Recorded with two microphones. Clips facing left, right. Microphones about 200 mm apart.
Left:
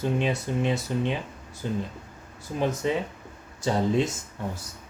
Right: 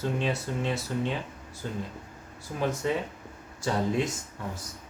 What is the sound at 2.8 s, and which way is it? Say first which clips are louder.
Speech: left 2 dB; 20° left (ahead or behind).